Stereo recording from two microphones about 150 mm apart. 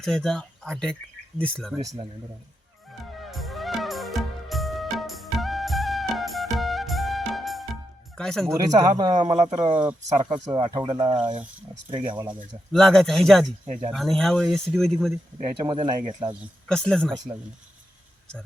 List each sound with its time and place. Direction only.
0.0 s speech: 5° left (ahead or behind)
3.2 s music: centre (ahead or behind)
8.2 s speech: 5° left (ahead or behind)
8.4 s a man's voice: 25° right (ahead or behind)
12.7 s speech: 5° left (ahead or behind)
15.6 s speech: 30° right (ahead or behind)
16.6 s speech: 5° left (ahead or behind)